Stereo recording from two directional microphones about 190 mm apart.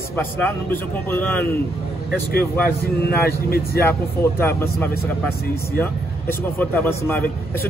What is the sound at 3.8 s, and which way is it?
Speech, 10° left (ahead or behind).